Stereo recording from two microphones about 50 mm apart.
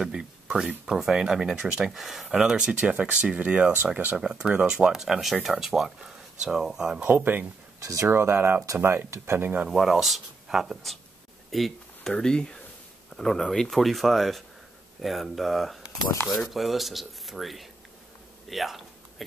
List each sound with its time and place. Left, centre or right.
0.0 s a sound: centre
0.8 s speech: centre
2.5 s speech: right
7.1 s speech: right
7.8 s speech: right
8.1 s speech: right
9.7 s speech: centre
11.5 s a sound: centre
12.1 s speech: centre
16.1 s speech: left
16.3 s speech: centre
18.5 s a sound: centre